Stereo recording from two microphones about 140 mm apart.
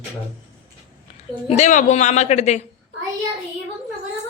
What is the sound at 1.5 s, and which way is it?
A woman's voice, 55° left (ahead or behind).